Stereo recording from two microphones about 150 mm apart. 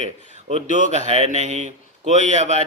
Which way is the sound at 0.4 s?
50° right (ahead or behind).